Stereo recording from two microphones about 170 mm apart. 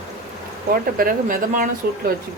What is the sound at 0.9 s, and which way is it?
Speech, 55° right (ahead or behind).